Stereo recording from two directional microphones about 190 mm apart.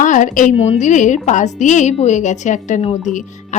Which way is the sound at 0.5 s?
30° left (ahead or behind).